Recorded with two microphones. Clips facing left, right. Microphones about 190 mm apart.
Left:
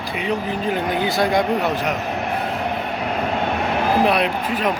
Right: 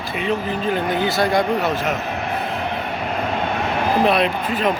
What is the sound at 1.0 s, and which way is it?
Speech, 15° left (ahead or behind).